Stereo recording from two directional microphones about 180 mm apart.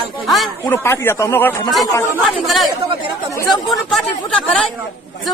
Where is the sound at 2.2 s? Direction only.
Centre (ahead or behind).